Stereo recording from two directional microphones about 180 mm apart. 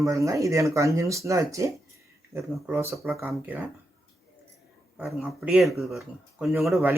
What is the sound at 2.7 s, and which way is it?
Speech, 15° right (ahead or behind).